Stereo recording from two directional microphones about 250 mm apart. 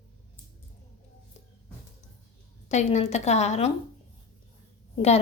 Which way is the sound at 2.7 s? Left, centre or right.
Left.